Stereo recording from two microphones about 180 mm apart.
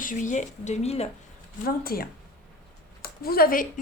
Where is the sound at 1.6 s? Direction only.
55° left (ahead or behind).